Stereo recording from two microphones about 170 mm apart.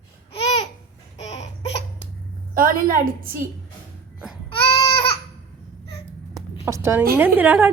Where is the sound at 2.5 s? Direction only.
55° right (ahead or behind).